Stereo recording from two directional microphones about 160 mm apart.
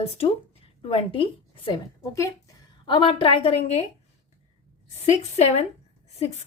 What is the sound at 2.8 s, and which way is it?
A woman's voice, 30° left (ahead or behind).